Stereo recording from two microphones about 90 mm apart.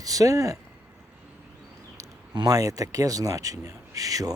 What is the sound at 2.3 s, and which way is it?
Speech, 45° right (ahead or behind).